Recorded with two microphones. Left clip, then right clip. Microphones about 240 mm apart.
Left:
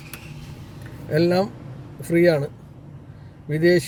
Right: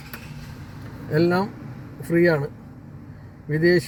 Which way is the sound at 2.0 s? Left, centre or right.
Left.